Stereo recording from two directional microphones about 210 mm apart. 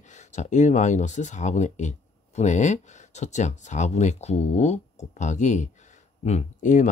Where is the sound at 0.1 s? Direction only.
35° left (ahead or behind).